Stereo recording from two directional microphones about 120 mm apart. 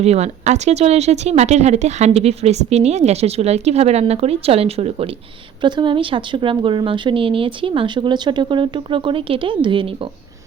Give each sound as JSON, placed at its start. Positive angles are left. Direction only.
{"t": 0.0, "sound": "speech", "side_deg": -65}
{"t": 5.6, "sound": "a woman's voice", "side_deg": -40}